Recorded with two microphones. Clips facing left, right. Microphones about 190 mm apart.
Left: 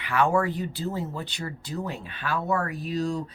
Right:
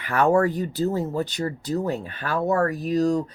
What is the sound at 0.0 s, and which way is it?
Speech, 45° right (ahead or behind).